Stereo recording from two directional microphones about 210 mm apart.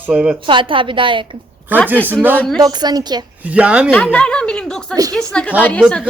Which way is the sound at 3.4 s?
5° right (ahead or behind).